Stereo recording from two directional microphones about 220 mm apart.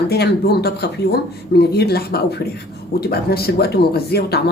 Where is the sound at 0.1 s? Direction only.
45° left (ahead or behind).